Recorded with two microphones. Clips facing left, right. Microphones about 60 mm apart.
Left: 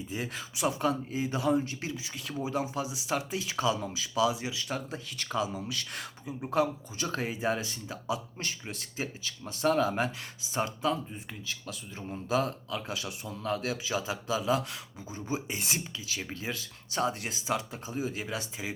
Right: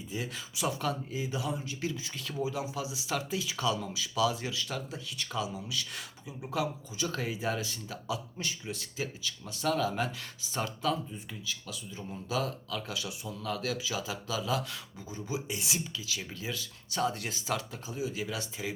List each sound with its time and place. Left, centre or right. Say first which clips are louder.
0.1 s speech: right 1 dB; left
2.0 s speech: even; centre
2.4 s speech: left 2 dB; left
4.3 s speech: left 2 dB; centre
4.9 s speech: left 3 dB; left
8.4 s speech: right 1 dB; left
11.1 s speech: even; left
15.5 s speech: left 1 dB; left
17.8 s speech: left 1 dB; left